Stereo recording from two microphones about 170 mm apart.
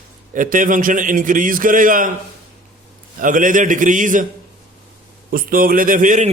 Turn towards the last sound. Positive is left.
turn(degrees=-50)  # may be behind; listen again after turning